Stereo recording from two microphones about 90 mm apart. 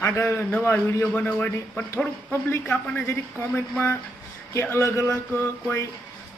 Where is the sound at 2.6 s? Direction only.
15° left (ahead or behind).